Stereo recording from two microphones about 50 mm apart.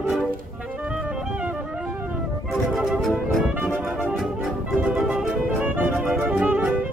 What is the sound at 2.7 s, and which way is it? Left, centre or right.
Music, centre.